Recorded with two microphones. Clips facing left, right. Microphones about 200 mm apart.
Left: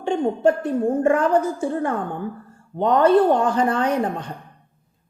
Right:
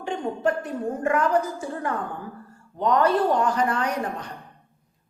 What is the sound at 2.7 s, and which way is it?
A woman's voice, 30° left (ahead or behind).